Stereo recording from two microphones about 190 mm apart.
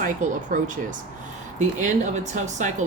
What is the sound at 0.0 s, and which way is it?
Speech, 45° right (ahead or behind).